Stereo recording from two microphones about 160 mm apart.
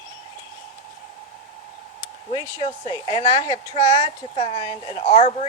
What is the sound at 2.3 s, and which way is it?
Speech, 35° left (ahead or behind).